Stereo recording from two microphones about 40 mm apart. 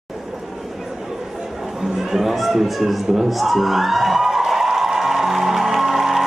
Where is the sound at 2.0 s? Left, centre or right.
Centre.